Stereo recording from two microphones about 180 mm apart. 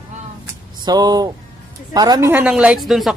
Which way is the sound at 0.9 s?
20° right (ahead or behind).